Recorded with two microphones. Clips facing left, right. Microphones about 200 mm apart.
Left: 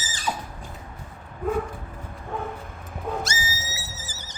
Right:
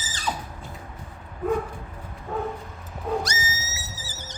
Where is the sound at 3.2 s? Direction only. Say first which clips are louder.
Even; 30° left (ahead or behind).